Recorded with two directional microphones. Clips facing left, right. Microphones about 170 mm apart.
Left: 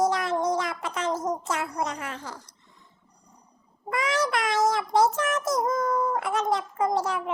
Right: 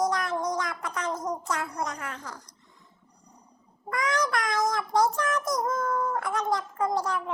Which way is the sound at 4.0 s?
25° left (ahead or behind).